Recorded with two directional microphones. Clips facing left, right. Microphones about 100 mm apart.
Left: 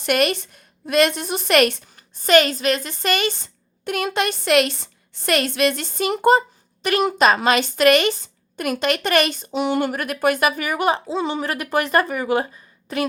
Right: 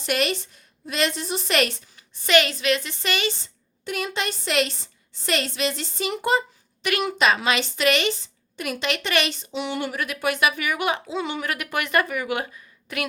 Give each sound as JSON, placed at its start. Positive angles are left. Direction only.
{"t": 0.0, "sound": "a woman's voice", "side_deg": 55}